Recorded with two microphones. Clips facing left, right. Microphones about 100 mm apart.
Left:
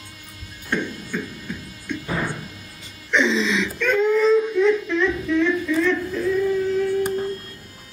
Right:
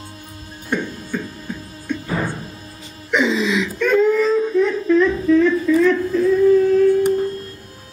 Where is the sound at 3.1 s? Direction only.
10° right (ahead or behind).